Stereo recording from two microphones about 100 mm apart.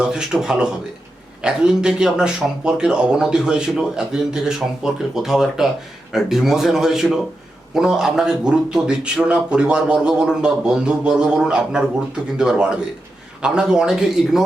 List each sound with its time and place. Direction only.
0.0 s a man's voice: 5° right (ahead or behind)